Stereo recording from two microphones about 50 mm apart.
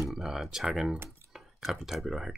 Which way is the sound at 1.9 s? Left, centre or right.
Centre.